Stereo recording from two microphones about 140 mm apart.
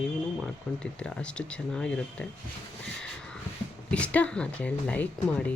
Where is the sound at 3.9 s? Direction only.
10° left (ahead or behind).